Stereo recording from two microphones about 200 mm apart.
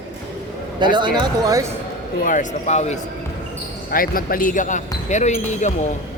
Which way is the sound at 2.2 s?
40° left (ahead or behind).